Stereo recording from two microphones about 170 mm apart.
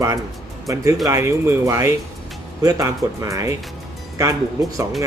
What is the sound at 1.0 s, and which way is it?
Speech, 15° right (ahead or behind).